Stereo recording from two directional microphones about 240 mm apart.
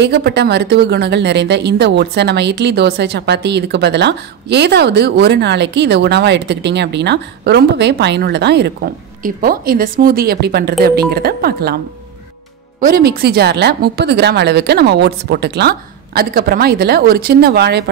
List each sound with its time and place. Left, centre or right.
0.0 s speech: right
12.8 s a woman's voice: right